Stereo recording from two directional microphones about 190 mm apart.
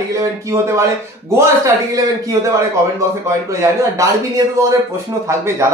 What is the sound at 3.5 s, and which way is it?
Speech, 15° right (ahead or behind).